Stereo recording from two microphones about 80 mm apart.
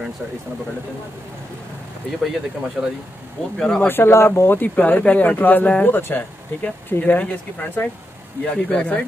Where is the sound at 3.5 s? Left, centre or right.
Centre.